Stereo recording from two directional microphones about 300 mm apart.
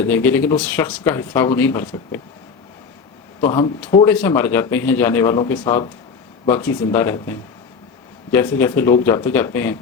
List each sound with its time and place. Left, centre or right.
0.0 s speech: centre
3.4 s speech: centre